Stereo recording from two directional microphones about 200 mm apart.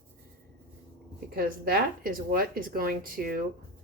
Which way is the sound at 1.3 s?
50° right (ahead or behind).